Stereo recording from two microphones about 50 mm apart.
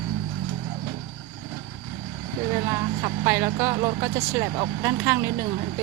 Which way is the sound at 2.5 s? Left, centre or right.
Right.